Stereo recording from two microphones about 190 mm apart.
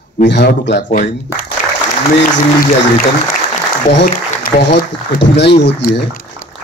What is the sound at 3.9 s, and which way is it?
Speech, 60° left (ahead or behind).